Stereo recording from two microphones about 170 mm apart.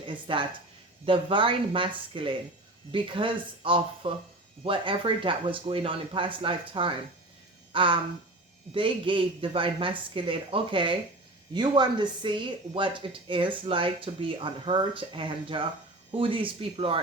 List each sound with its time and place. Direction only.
0.0 s speech: 30° right (ahead or behind)